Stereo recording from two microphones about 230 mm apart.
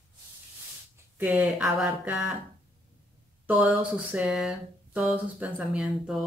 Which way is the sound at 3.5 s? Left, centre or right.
Centre.